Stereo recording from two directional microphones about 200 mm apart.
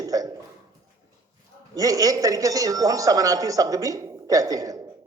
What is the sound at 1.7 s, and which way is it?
Speech, 15° right (ahead or behind).